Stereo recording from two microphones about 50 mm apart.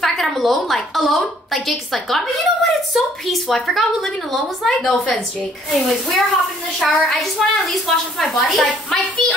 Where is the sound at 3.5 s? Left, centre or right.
Centre.